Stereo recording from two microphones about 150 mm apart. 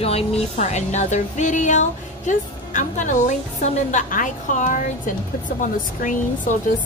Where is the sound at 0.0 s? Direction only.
45° left (ahead or behind).